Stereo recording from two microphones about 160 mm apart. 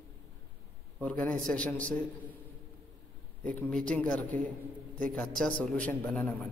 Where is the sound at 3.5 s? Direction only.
5° left (ahead or behind).